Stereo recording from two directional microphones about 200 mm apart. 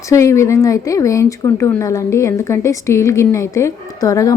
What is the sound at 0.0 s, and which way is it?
Speech, 15° left (ahead or behind).